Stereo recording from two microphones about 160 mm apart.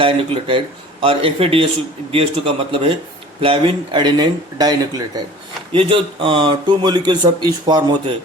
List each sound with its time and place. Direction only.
0.0 s a man's voice: 35° right (ahead or behind)
5.7 s speech: 35° right (ahead or behind)